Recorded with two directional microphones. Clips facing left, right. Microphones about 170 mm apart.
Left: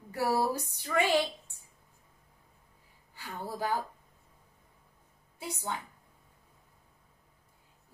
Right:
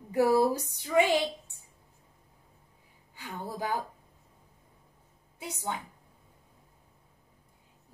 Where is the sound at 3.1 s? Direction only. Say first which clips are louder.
Right 1 dB; 15° right (ahead or behind).